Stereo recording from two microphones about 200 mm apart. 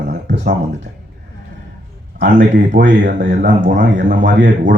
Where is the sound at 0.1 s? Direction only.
55° right (ahead or behind).